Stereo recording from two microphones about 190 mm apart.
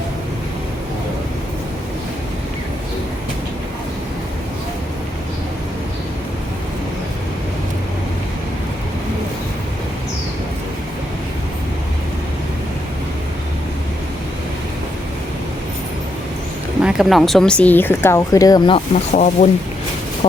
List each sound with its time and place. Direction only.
16.8 s speech: centre (ahead or behind); by 19.0 s 25° left (ahead or behind)
19.1 s speech: 40° left (ahead or behind)